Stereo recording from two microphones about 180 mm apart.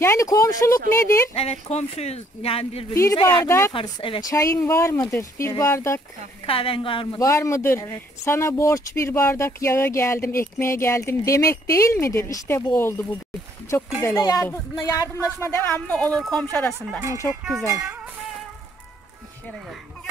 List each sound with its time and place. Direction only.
0.0 s speech: 15° left (ahead or behind)
1.3 s speech: 35° left (ahead or behind)
2.9 s speech: 15° left (ahead or behind)
3.2 s a woman's voice: 25° left (ahead or behind)
3.4 s speech: 15° left (ahead or behind)
3.7 s a woman's voice: 30° left (ahead or behind)
6.4 s a woman's voice: 30° left (ahead or behind)
7.2 s speech: 15° left (ahead or behind)
14.0 s speech: 15° left (ahead or behind)
17.6 s speech: 20° right (ahead or behind)